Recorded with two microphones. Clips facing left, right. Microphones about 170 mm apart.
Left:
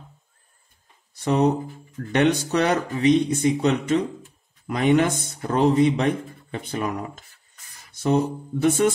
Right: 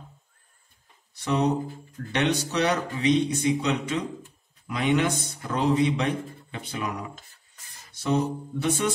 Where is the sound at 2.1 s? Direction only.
50° left (ahead or behind).